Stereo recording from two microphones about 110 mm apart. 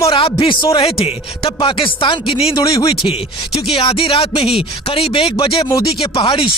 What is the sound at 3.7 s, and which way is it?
Speech, 60° left (ahead or behind).